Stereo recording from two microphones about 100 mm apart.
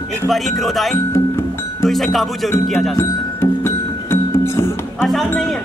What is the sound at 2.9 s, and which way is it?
Music, 25° left (ahead or behind).